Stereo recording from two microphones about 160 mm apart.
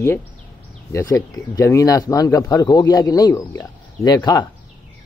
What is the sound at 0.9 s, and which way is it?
Speech, 20° left (ahead or behind).